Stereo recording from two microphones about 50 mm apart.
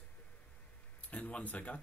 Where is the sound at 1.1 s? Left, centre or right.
Left.